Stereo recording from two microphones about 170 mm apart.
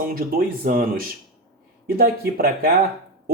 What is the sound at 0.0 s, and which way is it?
Speech, 60° right (ahead or behind).